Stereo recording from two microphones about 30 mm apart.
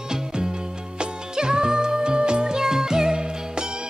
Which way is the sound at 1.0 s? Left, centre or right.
Right.